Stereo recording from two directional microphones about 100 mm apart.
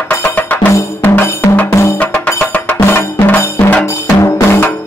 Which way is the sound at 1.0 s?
20° left (ahead or behind).